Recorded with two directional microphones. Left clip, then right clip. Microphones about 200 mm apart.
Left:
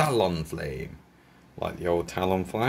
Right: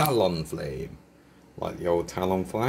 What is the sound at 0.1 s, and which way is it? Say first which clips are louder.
Speech: right 1 dB; 30° left (ahead or behind).